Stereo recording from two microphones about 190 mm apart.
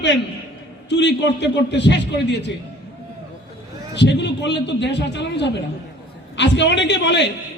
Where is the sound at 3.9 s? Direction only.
65° left (ahead or behind).